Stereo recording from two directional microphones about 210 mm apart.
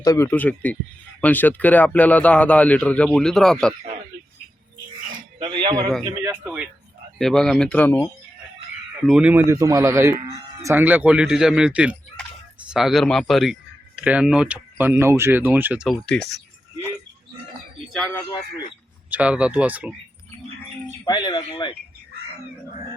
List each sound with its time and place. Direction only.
0.0 s speech: 15° left (ahead or behind)
5.4 s speech: 20° right (ahead or behind)
6.0 s speech: 10° right (ahead or behind); by 8.1 s 10° left (ahead or behind)
9.0 s speech: 5° right (ahead or behind)
17.9 s speech: 5° left (ahead or behind)
21.0 s speech: 20° left (ahead or behind)